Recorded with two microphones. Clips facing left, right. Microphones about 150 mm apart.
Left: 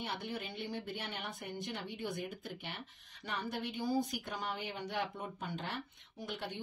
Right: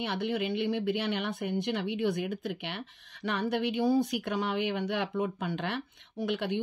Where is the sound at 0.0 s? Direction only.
75° right (ahead or behind).